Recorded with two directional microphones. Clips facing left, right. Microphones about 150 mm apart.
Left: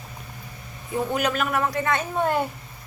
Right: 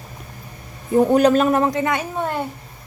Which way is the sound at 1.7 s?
15° right (ahead or behind).